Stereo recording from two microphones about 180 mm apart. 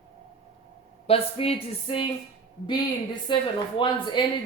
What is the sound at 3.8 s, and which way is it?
Speech, 25° left (ahead or behind).